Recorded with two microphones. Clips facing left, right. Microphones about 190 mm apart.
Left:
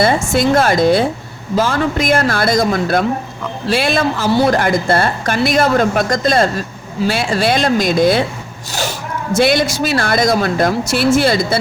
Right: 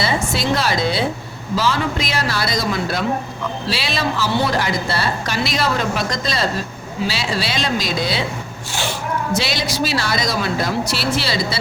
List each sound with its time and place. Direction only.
0.0 s a woman's voice: 50° left (ahead or behind)
9.3 s a woman's voice: 50° left (ahead or behind)